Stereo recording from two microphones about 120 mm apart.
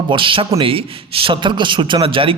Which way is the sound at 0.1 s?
45° right (ahead or behind).